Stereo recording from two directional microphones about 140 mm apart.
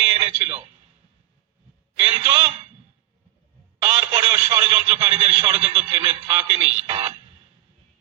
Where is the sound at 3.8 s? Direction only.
40° right (ahead or behind).